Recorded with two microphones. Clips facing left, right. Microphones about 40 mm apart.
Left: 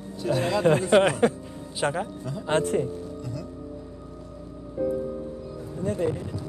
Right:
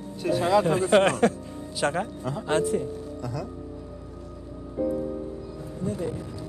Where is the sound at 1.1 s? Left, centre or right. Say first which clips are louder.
Even; centre.